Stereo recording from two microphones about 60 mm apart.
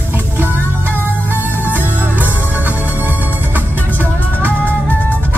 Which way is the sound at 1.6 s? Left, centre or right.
Right.